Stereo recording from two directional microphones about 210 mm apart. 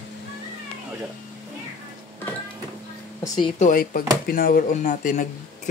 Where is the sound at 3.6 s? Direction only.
40° left (ahead or behind).